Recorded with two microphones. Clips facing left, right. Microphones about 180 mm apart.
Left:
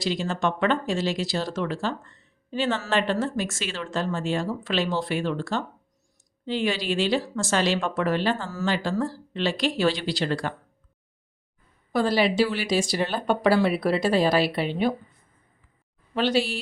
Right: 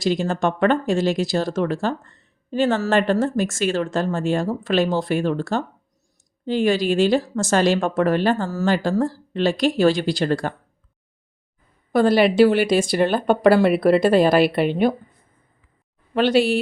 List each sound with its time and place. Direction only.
0.0 s speech: 50° right (ahead or behind)
11.9 s speech: 55° right (ahead or behind)
16.1 s speech: 60° right (ahead or behind)